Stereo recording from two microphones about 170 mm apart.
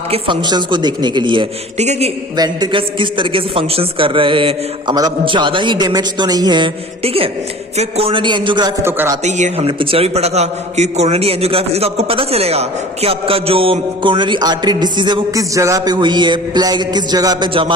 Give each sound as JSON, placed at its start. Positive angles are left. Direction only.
{"t": 0.1, "sound": "a man's voice", "side_deg": -25}
{"t": 1.8, "sound": "a man's voice", "side_deg": -40}
{"t": 2.3, "sound": "a man's voice", "side_deg": -25}
{"t": 8.8, "sound": "a sound", "side_deg": -15}
{"t": 9.2, "sound": "speech", "side_deg": -40}
{"t": 9.6, "sound": "a man's voice", "side_deg": -30}